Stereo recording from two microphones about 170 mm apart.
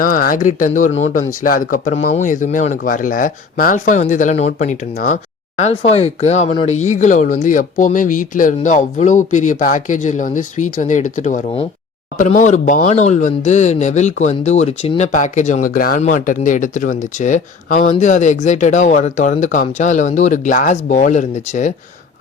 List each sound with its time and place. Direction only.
0.0 s a man's voice: 55° left (ahead or behind)
1.5 s speech: 55° left (ahead or behind)